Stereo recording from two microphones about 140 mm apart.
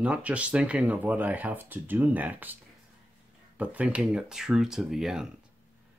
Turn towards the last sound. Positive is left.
turn(degrees=-5)  # may be behind; listen again after turning